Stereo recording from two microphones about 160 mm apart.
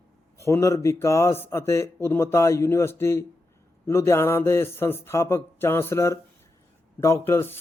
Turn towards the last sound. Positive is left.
turn(degrees=15)  # may be behind; listen again after turning